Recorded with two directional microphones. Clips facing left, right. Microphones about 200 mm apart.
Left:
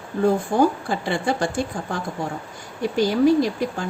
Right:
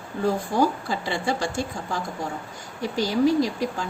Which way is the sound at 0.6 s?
55° left (ahead or behind).